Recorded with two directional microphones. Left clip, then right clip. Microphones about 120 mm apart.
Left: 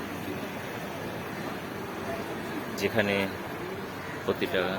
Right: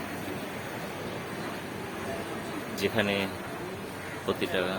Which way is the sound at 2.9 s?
5° right (ahead or behind).